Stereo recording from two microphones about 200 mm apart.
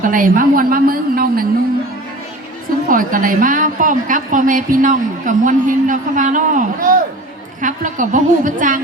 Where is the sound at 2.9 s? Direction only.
45° right (ahead or behind).